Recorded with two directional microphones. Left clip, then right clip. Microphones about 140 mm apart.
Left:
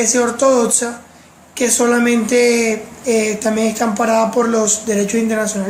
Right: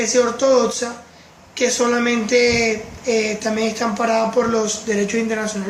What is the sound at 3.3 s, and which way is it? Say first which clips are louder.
Speech: left 4 dB; 80° left.